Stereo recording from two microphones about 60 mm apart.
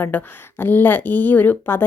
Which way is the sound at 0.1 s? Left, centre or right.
Left.